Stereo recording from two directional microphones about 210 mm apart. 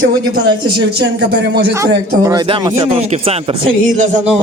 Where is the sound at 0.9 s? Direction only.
55° right (ahead or behind).